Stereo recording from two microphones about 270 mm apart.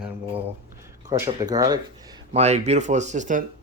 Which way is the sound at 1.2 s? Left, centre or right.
Centre.